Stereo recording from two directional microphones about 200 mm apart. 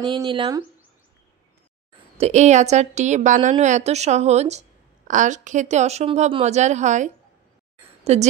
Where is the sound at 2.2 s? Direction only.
35° right (ahead or behind).